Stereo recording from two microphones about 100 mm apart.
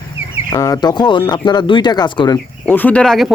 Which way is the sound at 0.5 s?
35° left (ahead or behind).